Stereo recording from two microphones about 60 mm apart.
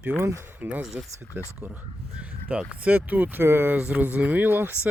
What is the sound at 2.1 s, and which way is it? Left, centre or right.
Speech, centre.